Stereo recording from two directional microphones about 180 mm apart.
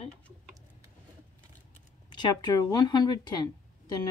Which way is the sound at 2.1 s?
25° left (ahead or behind).